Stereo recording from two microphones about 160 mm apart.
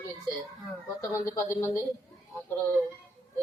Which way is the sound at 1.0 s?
20° left (ahead or behind).